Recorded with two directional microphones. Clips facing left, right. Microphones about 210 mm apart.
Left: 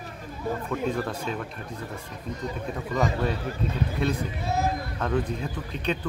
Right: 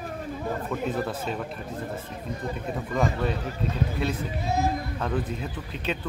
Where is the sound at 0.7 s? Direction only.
5° right (ahead or behind).